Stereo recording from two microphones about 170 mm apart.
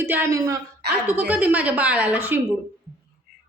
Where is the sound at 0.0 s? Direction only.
15° right (ahead or behind).